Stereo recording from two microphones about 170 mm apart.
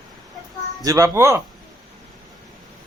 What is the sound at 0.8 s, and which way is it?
Speech, 20° right (ahead or behind).